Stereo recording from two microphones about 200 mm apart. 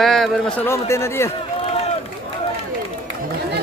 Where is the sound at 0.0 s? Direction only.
Centre (ahead or behind).